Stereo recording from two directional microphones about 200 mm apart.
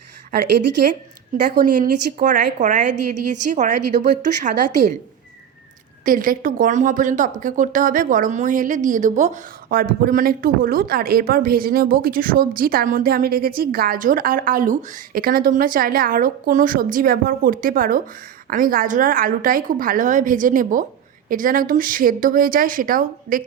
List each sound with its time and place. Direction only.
1.5 s a woman's voice: 40° right (ahead or behind)
6.1 s speech: 45° right (ahead or behind)